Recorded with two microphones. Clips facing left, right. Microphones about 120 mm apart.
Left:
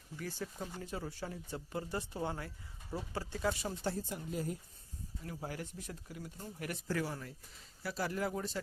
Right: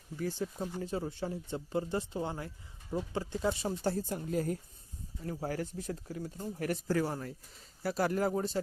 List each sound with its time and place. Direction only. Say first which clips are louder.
0.2 s speech: right 7 dB; 25° right (ahead or behind)
3.8 s speech: right 5 dB; 40° right (ahead or behind)
5.2 s speech: right 7 dB; 40° right (ahead or behind)
8.3 s speech: right 7 dB; 35° right (ahead or behind)